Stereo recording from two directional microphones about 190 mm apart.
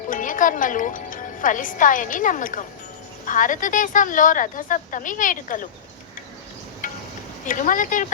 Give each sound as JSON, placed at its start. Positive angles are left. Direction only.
{"t": 0.1, "sound": "a woman's voice", "side_deg": 45}
{"t": 6.8, "sound": "insect", "side_deg": 45}
{"t": 7.4, "sound": "a woman's voice", "side_deg": 45}